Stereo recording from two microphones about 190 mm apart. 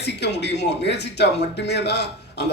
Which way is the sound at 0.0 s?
65° left (ahead or behind).